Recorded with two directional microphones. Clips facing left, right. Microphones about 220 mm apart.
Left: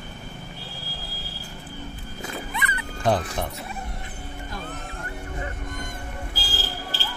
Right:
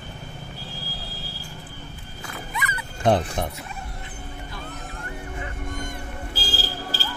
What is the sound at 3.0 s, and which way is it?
Speech, 20° right (ahead or behind).